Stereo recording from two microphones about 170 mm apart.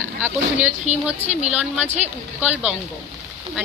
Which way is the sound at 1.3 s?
40° right (ahead or behind).